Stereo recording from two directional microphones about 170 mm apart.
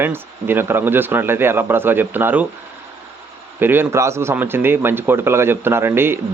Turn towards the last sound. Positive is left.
turn(degrees=-15)  # may be behind; listen again after turning